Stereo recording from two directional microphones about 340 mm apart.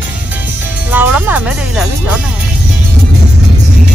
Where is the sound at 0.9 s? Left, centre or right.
Centre.